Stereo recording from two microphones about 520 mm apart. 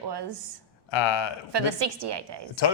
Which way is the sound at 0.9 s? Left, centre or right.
Left.